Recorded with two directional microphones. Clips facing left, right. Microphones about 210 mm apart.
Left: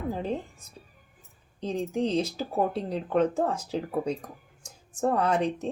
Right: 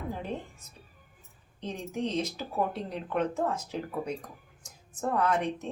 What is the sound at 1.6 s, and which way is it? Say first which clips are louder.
Speech: left 5 dB; 35° left (ahead or behind).